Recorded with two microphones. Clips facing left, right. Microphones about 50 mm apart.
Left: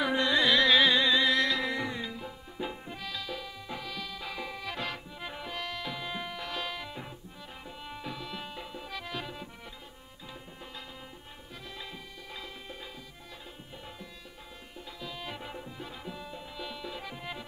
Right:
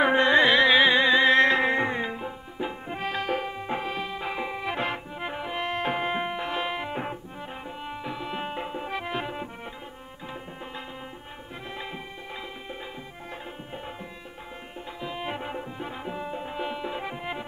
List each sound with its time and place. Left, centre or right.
0.0 s music: right
2.5 s music: right
2.9 s music: right
7.8 s tabla: right
15.0 s tabla: right